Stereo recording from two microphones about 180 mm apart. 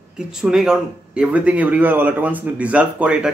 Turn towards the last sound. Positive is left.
turn(degrees=-5)  # may be behind; listen again after turning